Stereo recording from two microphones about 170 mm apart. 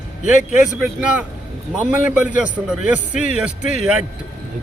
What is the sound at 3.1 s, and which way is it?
Speech, 45° left (ahead or behind).